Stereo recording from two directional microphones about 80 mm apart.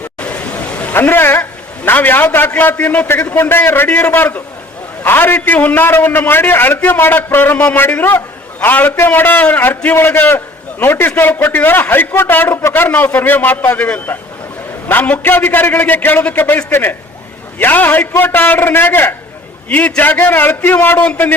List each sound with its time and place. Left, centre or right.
0.2 s a man's voice: centre